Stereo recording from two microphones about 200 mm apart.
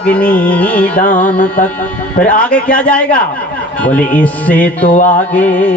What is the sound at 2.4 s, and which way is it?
Speech, 5° left (ahead or behind).